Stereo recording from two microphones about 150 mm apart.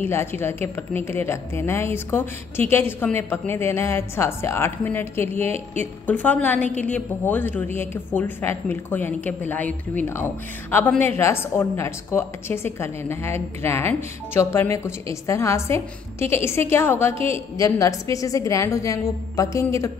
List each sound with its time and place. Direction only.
0.0 s a woman's voice: 15° left (ahead or behind)